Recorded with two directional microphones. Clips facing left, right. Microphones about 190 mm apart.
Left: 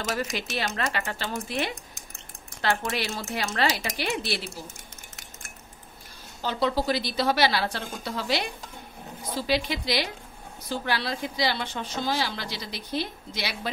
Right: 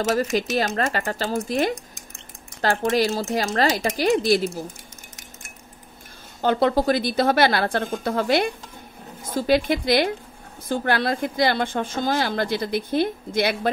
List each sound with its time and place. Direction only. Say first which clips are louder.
0.1 s speech: right 7 dB; 40° right (ahead or behind)
6.4 s speech: right 7 dB; 55° right (ahead or behind)